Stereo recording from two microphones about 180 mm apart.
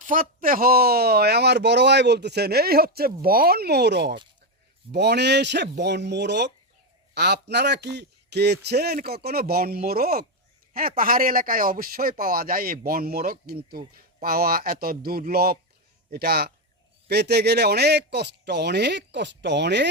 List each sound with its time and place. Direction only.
0.0 s speech: 50° right (ahead or behind); by 19.9 s 70° right (ahead or behind)